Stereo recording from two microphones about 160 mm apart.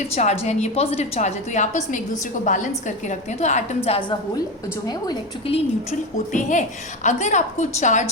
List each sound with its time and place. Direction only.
0.1 s a woman's voice: 45° left (ahead or behind)
6.3 s a woman's voice: 50° left (ahead or behind)